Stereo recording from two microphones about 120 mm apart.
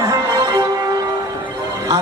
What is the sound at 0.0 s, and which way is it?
Music, 30° right (ahead or behind).